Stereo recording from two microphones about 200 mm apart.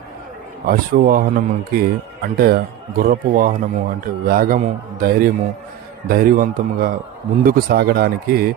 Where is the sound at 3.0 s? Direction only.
45° right (ahead or behind).